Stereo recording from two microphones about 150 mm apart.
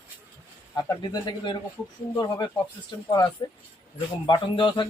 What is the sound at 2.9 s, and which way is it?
A man's voice, 30° left (ahead or behind).